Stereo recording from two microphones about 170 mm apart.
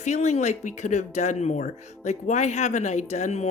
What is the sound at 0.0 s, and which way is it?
Speech, 40° left (ahead or behind).